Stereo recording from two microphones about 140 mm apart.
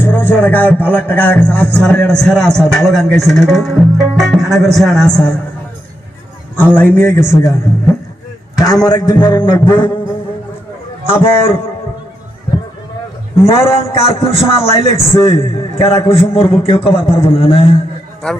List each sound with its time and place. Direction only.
0.0 s a man's voice: 15° left (ahead or behind)
6.6 s a man's voice: 15° left (ahead or behind)
8.5 s a man's voice: 25° left (ahead or behind)
9.5 s music: 35° left (ahead or behind)
11.1 s music: 40° left (ahead or behind)
13.4 s a man's voice: 45° left (ahead or behind)
18.2 s a man's voice: 5° left (ahead or behind)